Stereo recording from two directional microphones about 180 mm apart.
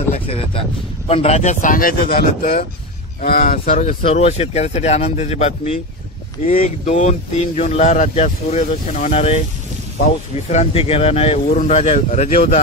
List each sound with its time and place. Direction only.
0.1 s speech: 35° left (ahead or behind)